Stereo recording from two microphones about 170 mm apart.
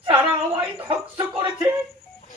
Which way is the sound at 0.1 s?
20° right (ahead or behind).